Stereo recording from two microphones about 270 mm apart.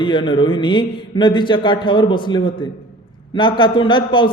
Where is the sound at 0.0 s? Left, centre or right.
Centre.